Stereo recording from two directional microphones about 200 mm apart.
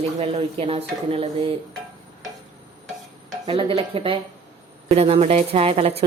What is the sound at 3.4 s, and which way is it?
A woman's voice, 25° right (ahead or behind).